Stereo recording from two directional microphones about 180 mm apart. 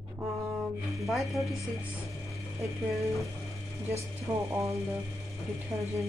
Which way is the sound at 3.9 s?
15° right (ahead or behind).